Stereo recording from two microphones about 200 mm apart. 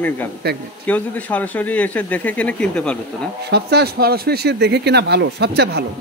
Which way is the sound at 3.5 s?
55° right (ahead or behind).